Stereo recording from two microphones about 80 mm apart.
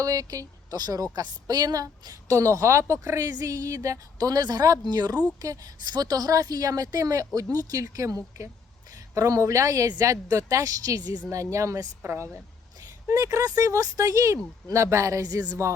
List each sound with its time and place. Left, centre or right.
0.0 s a woman's voice: right